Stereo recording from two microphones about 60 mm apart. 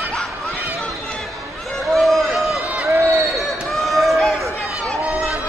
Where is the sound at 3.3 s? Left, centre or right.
Centre.